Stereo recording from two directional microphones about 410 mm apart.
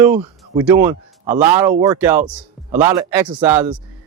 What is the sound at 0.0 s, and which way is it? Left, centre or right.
Speech, centre.